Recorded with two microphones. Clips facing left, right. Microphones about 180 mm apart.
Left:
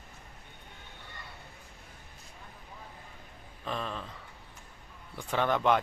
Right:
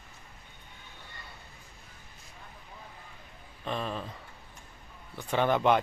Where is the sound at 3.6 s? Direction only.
Centre (ahead or behind).